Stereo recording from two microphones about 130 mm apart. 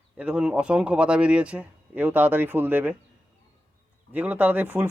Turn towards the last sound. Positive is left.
turn(degrees=-15)  # may be behind; listen again after turning